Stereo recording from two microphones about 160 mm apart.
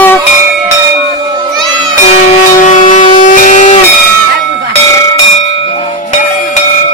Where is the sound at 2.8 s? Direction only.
55° left (ahead or behind).